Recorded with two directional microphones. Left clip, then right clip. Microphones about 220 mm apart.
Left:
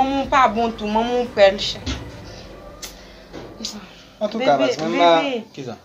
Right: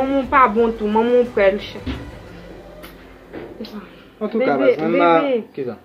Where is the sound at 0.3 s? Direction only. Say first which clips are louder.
Right 4 dB; 30° left (ahead or behind).